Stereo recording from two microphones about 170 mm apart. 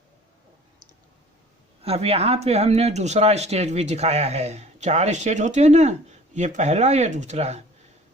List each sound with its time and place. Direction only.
1.8 s speech: 35° right (ahead or behind)